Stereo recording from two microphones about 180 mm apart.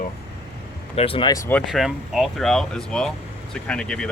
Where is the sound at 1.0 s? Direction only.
30° left (ahead or behind).